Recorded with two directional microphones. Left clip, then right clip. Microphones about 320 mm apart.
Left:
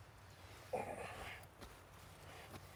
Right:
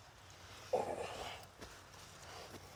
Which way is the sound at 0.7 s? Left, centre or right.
Right.